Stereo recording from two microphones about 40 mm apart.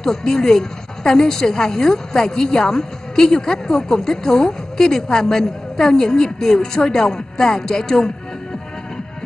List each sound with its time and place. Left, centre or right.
0.0 s a woman's voice: centre